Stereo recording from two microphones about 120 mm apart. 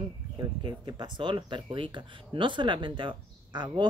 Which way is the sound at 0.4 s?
35° right (ahead or behind).